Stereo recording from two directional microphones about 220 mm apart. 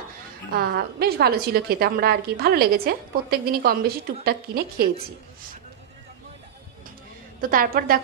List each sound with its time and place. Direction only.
0.5 s a woman's voice: 45° right (ahead or behind)
7.4 s a woman's voice: 40° right (ahead or behind)